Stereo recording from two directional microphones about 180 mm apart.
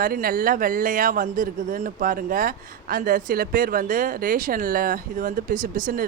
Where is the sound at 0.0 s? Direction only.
55° right (ahead or behind).